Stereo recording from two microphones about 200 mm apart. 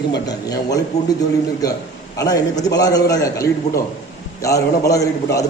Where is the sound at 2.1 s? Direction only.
20° left (ahead or behind).